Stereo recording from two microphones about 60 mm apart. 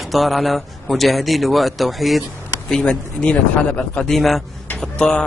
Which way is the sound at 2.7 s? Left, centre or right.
Centre.